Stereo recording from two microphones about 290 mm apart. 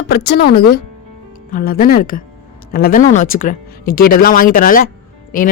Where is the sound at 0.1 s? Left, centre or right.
Left.